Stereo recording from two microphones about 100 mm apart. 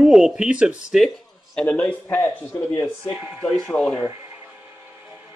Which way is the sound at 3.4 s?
5° left (ahead or behind).